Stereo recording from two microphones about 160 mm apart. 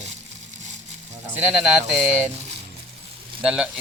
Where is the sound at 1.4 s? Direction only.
5° right (ahead or behind).